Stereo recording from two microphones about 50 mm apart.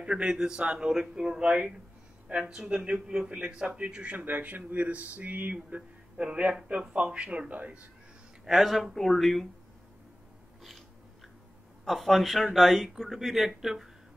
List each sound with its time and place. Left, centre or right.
0.0 s a man's voice: centre; by 5.8 s right
5.8 s a man's voice: right
8.5 s speech: centre
11.8 s speech: centre